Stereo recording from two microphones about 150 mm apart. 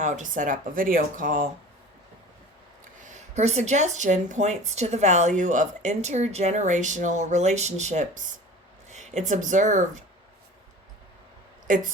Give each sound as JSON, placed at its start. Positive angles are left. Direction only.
{"t": 0.0, "sound": "speech", "side_deg": -55}
{"t": 3.0, "sound": "speech", "side_deg": -50}
{"t": 11.7, "sound": "speech", "side_deg": -60}